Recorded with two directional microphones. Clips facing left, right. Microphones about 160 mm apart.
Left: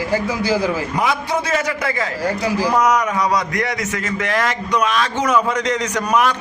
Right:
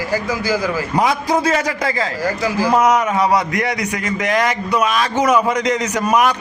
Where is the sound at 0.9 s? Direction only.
35° right (ahead or behind).